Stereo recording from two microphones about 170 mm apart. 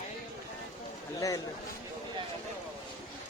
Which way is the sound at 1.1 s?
20° left (ahead or behind).